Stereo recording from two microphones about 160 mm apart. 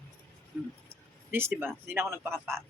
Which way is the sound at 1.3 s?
15° right (ahead or behind).